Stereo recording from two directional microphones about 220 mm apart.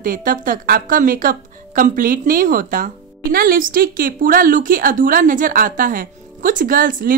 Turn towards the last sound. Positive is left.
turn(degrees=-40)  # may be behind; listen again after turning